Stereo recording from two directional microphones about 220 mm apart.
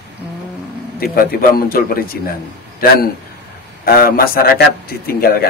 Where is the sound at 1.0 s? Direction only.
40° left (ahead or behind).